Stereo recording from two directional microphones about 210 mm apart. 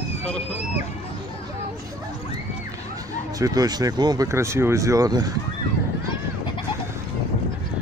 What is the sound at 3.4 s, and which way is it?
Speech, 20° right (ahead or behind).